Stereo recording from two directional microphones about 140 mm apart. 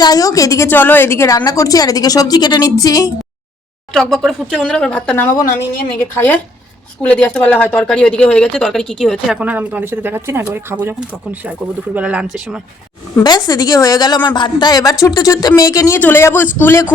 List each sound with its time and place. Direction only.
0.0 s speech: 25° left (ahead or behind)
3.9 s speech: centre (ahead or behind)
13.2 s speech: 30° left (ahead or behind)